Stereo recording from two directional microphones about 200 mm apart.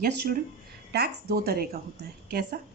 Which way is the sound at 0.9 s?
55° right (ahead or behind).